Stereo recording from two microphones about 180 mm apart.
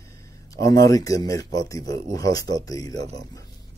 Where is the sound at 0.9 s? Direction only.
20° left (ahead or behind).